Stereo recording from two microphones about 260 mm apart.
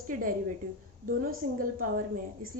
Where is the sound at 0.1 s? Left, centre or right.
Right.